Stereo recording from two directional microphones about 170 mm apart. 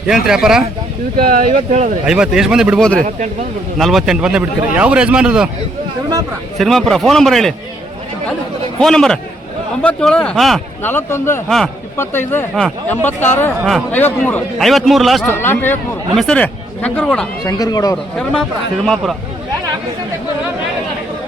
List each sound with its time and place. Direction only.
0.1 s speech: 5° right (ahead or behind)
1.1 s speech: 55° right (ahead or behind)
2.0 s speech: 5° right (ahead or behind)
6.6 s speech: centre (ahead or behind)
8.8 s speech: 5° left (ahead or behind)
10.8 s speech: 15° left (ahead or behind)
11.4 s speech: centre (ahead or behind)
11.9 s speech: 15° left (ahead or behind)
15.3 s speech: 10° left (ahead or behind)
17.4 s speech: 20° left (ahead or behind)
17.9 s speech: 5° left (ahead or behind)